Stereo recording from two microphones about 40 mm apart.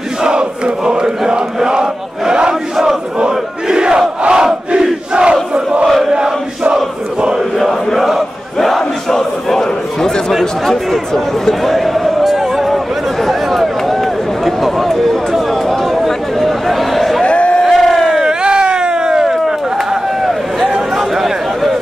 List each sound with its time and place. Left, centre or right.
0.2 s crowd: right
0.8 s chant: centre
3.3 s crowd: centre
5.9 s chant: centre
6.7 s a sound: right
7.5 s chant: centre
8.5 s battle cry: centre
10.7 s speech: centre
11.6 s a sound: centre
17.2 s a sound: left
17.6 s crowd: centre
18.2 s cat: right
20.9 s a sound: centre